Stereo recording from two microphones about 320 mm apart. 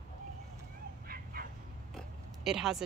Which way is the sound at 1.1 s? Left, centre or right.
Right.